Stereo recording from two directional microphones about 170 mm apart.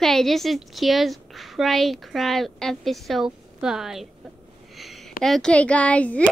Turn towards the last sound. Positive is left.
turn(degrees=10)  # may be behind; listen again after turning